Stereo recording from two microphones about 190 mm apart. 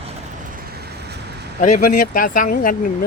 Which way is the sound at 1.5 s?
40° left (ahead or behind).